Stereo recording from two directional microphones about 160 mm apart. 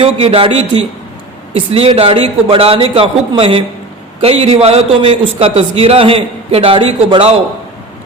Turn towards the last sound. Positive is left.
turn(degrees=-40)  # may be behind; listen again after turning